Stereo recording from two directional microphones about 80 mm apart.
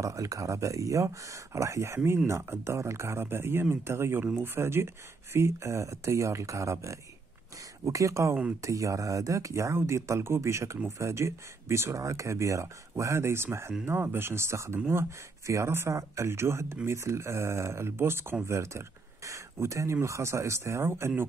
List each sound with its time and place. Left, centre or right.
0.0 s speech: right